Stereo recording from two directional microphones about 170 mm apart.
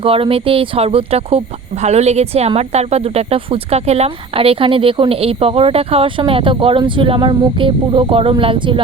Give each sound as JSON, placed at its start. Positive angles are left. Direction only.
{"t": 0.0, "sound": "a woman's voice", "side_deg": -35}